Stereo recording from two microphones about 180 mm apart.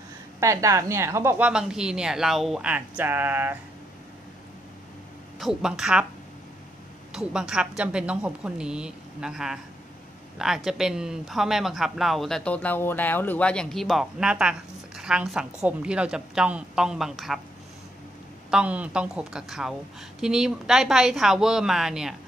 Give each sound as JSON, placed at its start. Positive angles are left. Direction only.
{"t": 0.4, "sound": "a woman's voice", "side_deg": -15}
{"t": 1.5, "sound": "speech", "side_deg": -5}
{"t": 5.4, "sound": "speech", "side_deg": -5}
{"t": 7.1, "sound": "speech", "side_deg": -5}
{"t": 18.5, "sound": "speech", "side_deg": -5}